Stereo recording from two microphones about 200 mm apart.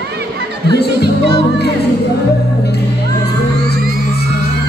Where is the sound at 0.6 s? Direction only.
55° right (ahead or behind).